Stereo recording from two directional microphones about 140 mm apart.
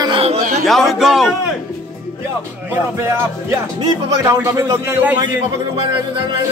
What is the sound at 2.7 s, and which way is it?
Speech, 20° right (ahead or behind).